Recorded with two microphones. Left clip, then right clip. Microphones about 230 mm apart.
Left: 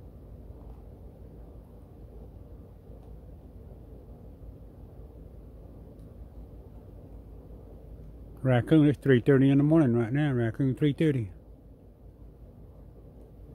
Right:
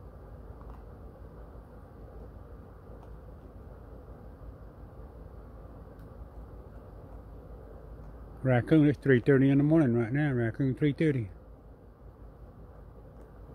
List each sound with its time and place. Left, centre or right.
8.5 s speech: centre